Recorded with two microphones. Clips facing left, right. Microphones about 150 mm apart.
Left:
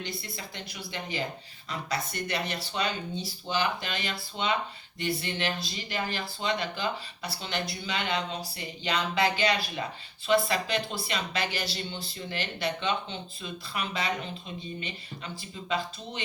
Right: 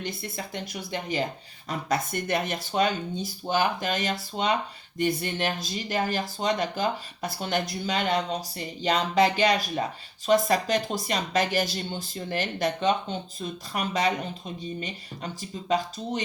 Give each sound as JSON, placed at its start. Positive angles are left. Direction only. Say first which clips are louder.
{"t": 0.0, "sound": "speech", "louder": "right 4 dB", "side_deg": -50}